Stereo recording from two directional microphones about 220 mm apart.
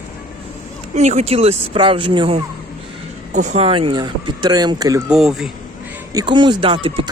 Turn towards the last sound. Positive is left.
turn(degrees=-25)  # may be behind; listen again after turning